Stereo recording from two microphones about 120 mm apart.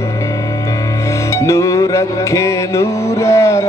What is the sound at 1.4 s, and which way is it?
Music, 25° left (ahead or behind).